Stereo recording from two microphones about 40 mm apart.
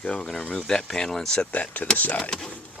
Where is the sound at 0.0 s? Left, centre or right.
Left.